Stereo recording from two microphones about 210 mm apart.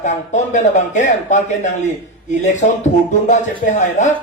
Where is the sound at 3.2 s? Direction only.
35° left (ahead or behind).